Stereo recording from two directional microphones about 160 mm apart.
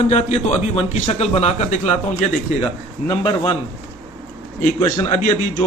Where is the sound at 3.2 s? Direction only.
30° left (ahead or behind).